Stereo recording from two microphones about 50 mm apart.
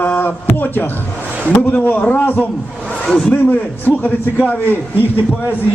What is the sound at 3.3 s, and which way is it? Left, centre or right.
A man's voice, left.